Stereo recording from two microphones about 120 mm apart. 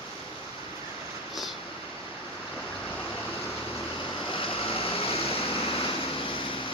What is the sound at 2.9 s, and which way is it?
Vehicle, 15° left (ahead or behind).